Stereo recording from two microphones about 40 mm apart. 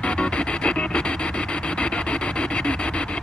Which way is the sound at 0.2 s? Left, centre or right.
Left.